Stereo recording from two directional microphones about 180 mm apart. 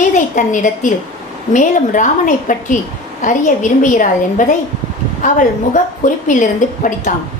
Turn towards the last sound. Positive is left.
turn(degrees=45)  # may be behind; listen again after turning